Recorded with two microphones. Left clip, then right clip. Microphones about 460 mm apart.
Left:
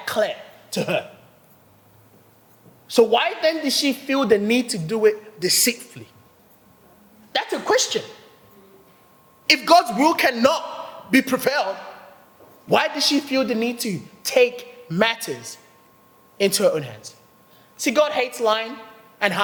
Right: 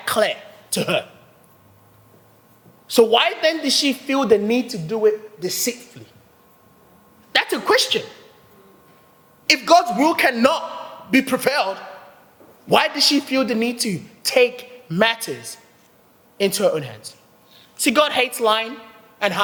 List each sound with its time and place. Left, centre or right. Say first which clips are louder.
0.0 s a sound: right 3 dB; centre
2.8 s a woman's voice: right 2 dB; centre
7.3 s a woman's voice: right 3 dB; centre
9.5 s a woman's voice: right 1 dB; centre
17.7 s a woman's voice: right 2 dB; right
18.4 s a woman's voice: right 1 dB; centre
19.2 s a man's voice: even; centre